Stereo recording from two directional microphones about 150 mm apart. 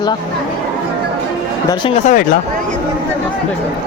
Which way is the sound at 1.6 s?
30° left (ahead or behind).